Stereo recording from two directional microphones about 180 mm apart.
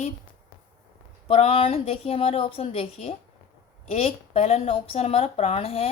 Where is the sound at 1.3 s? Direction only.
30° left (ahead or behind).